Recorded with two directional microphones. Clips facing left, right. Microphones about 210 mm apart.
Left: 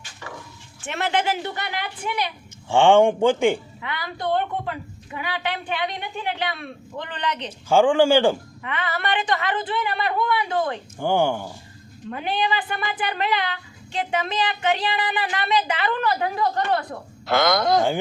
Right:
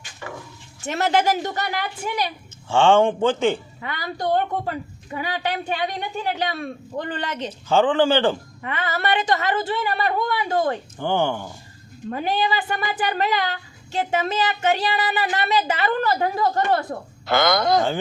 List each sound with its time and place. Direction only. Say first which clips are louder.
0.8 s speech: right 4 dB; 40° right (ahead or behind)
2.6 s speech: left 1 dB; 15° left (ahead or behind)
3.8 s a woman's voice: right 2 dB; 40° right (ahead or behind)
7.7 s speech: left 2 dB; 10° left (ahead or behind)
8.6 s speech: right 2 dB; 40° right (ahead or behind)
10.9 s speech: left 5 dB; 10° left (ahead or behind)
12.1 s speech: right 2 dB; 40° right (ahead or behind)
17.2 s speech: even; centre (ahead or behind)